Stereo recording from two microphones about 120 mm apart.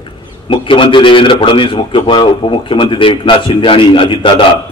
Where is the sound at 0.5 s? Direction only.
45° left (ahead or behind).